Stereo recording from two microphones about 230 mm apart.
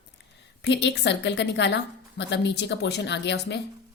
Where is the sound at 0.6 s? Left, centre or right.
Left.